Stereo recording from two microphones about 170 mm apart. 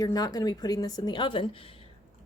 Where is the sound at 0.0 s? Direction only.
20° left (ahead or behind).